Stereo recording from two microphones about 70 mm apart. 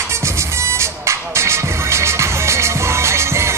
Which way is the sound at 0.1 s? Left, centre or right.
Right.